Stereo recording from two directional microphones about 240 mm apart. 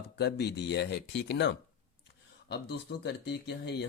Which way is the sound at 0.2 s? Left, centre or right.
Left.